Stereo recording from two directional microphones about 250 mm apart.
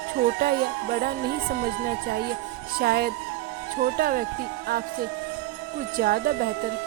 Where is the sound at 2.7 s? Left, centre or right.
Right.